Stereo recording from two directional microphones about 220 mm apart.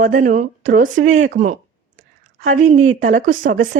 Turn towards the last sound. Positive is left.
turn(degrees=-35)  # may be behind; listen again after turning